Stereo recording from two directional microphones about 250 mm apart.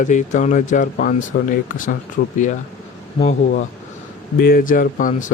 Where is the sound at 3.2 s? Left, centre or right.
Left.